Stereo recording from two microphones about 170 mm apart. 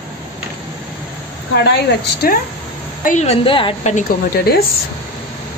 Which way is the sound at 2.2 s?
60° left (ahead or behind).